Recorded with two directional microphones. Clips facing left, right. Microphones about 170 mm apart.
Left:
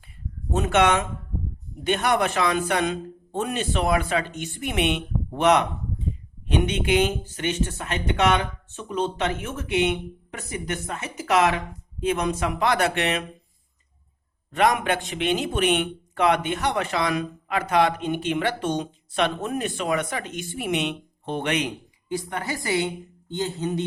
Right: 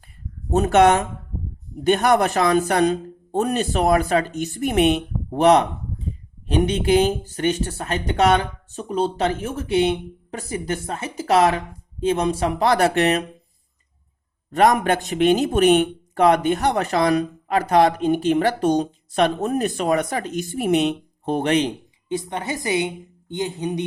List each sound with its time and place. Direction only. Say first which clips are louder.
0.5 s speech: right 5 dB; 40° right (ahead or behind)
14.5 s speech: right 4 dB; 40° right (ahead or behind); by 23.8 s 15° right (ahead or behind)